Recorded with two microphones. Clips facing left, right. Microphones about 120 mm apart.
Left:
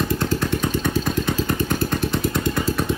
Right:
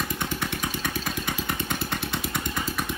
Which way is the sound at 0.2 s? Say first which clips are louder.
Left 8 dB; 20° right (ahead or behind).